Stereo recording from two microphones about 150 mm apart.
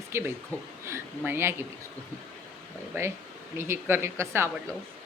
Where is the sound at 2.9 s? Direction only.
15° right (ahead or behind).